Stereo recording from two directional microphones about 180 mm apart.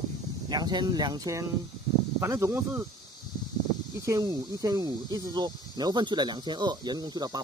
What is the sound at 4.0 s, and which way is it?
Speech, 20° right (ahead or behind).